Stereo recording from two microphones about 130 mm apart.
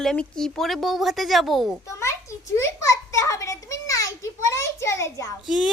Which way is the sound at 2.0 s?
20° left (ahead or behind).